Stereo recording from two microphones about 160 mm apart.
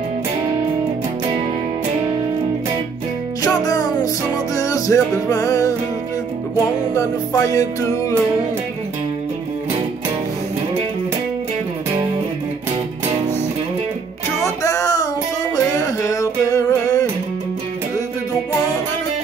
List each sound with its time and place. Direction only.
3.4 s music: 20° left (ahead or behind)
6.9 s music: 20° left (ahead or behind)
14.4 s music: 20° left (ahead or behind)